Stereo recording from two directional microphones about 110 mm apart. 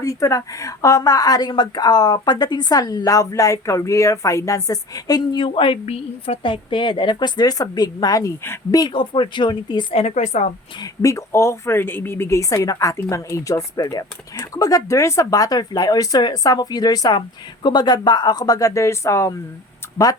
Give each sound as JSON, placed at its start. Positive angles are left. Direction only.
{"t": 0.0, "sound": "speech", "side_deg": 30}
{"t": 5.7, "sound": "a woman's voice", "side_deg": 70}
{"t": 8.9, "sound": "a woman's voice", "side_deg": 50}
{"t": 9.9, "sound": "a woman's voice", "side_deg": 80}
{"t": 10.8, "sound": "a woman's voice", "side_deg": 30}